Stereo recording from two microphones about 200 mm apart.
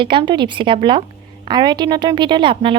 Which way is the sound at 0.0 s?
25° right (ahead or behind).